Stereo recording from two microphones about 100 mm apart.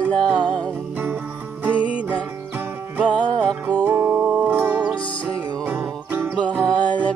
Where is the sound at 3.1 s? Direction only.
10° left (ahead or behind).